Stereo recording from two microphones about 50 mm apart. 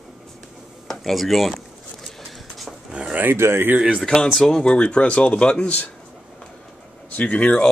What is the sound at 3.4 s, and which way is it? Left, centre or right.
Speech, right.